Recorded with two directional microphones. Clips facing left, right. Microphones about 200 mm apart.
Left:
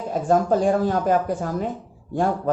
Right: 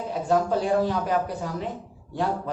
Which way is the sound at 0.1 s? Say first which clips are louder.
Left 4 dB; 45° left (ahead or behind).